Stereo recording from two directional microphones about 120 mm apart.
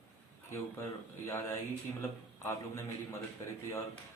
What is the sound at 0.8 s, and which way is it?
A man's voice, 20° left (ahead or behind).